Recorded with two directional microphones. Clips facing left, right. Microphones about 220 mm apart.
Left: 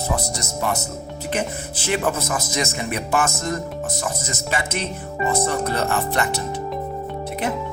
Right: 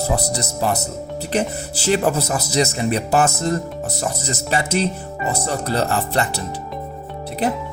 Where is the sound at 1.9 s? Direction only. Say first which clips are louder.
Right 4 dB; 35° right (ahead or behind).